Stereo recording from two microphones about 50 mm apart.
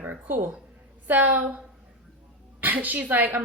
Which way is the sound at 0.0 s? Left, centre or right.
Right.